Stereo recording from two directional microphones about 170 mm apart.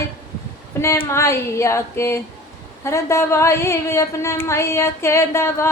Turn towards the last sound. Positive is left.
turn(degrees=15)  # may be behind; listen again after turning